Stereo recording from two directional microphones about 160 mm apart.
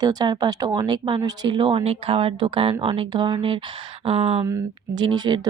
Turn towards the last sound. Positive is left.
turn(degrees=-25)  # may be behind; listen again after turning